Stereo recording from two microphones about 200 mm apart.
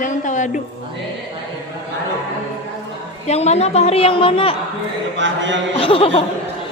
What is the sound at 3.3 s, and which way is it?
A woman's voice, 35° left (ahead or behind).